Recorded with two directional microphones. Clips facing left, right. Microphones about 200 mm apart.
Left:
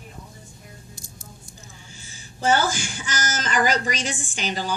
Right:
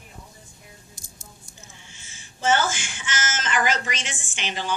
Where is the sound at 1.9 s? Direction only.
35° left (ahead or behind).